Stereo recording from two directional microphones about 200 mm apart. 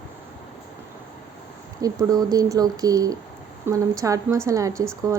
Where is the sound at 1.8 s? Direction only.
20° right (ahead or behind).